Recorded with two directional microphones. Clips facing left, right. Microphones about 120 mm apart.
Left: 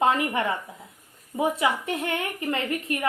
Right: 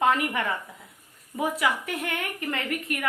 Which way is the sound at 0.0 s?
25° left (ahead or behind).